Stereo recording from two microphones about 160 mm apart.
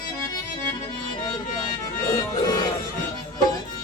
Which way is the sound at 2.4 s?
25° left (ahead or behind).